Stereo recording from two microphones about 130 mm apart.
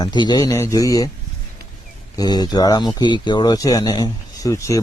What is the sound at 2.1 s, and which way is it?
Speech, 30° left (ahead or behind).